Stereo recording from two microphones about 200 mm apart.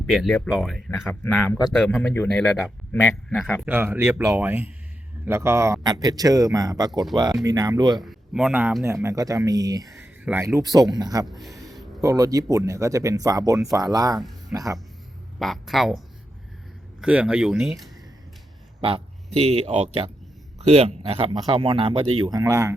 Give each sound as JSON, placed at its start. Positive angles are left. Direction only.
{"t": 0.1, "sound": "speech", "side_deg": 0}
{"t": 8.0, "sound": "speech", "side_deg": -5}
{"t": 11.3, "sound": "speech", "side_deg": 0}
{"t": 11.7, "sound": "a sound", "side_deg": 0}
{"t": 12.0, "sound": "speech", "side_deg": -15}
{"t": 15.4, "sound": "speech", "side_deg": 0}
{"t": 17.0, "sound": "speech", "side_deg": -5}
{"t": 18.8, "sound": "speech", "side_deg": -25}